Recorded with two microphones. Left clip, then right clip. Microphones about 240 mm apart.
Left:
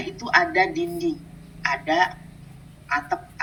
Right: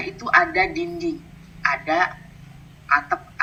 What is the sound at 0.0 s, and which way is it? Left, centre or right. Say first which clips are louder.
Speech: right 2 dB; centre.